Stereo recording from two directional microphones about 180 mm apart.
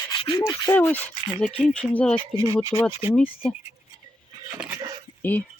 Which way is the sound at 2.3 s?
15° right (ahead or behind).